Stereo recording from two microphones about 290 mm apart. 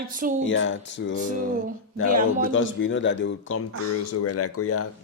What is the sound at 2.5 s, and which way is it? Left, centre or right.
Speech, left.